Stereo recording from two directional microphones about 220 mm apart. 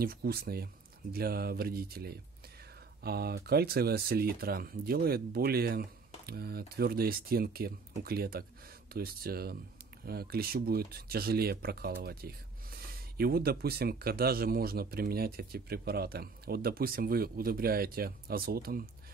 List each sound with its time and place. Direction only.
0.0 s speech: 45° right (ahead or behind)